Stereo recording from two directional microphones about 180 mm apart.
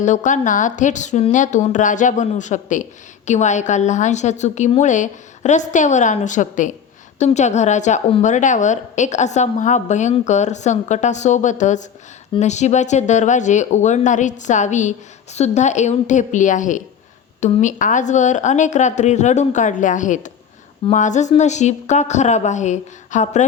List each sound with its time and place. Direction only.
0.0 s a woman's voice: 40° left (ahead or behind)